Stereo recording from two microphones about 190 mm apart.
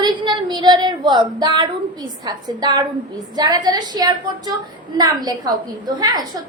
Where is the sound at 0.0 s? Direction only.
25° right (ahead or behind).